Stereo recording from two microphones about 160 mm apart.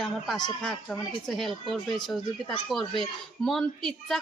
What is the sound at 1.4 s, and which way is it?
A woman's voice, centre (ahead or behind).